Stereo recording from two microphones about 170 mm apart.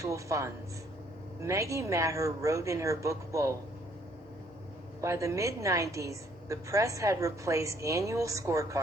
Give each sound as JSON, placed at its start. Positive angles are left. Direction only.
{"t": 0.0, "sound": "a woman's voice", "side_deg": -20}
{"t": 4.9, "sound": "a woman's voice", "side_deg": -20}